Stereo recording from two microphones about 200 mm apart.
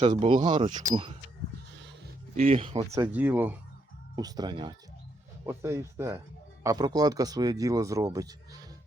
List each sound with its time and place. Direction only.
0.0 s speech: 25° right (ahead or behind)
2.3 s speech: 30° right (ahead or behind)
3.1 s speech: 10° right (ahead or behind)